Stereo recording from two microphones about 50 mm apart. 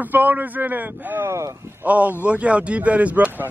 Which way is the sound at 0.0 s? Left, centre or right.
Right.